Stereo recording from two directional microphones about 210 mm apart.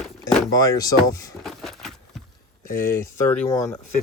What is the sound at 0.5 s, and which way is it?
Speech, 15° left (ahead or behind).